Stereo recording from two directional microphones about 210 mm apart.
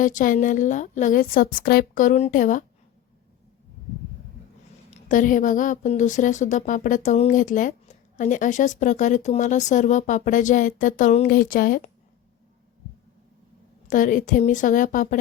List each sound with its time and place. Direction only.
0.0 s a woman's voice: 40° left (ahead or behind)
4.9 s a woman's voice: 40° left (ahead or behind)
13.8 s a woman's voice: 40° left (ahead or behind)